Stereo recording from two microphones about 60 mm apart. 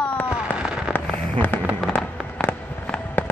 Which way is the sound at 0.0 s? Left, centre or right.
Left.